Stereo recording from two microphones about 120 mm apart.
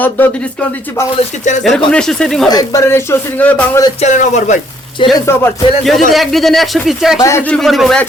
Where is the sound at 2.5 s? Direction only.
30° left (ahead or behind); by 3.7 s 15° left (ahead or behind).